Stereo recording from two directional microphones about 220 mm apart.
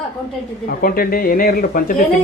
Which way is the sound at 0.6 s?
40° left (ahead or behind).